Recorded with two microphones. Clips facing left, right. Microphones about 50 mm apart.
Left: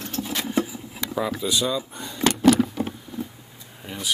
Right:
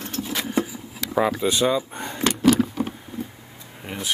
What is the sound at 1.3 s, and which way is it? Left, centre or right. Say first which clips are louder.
Speech: right 4 dB; right.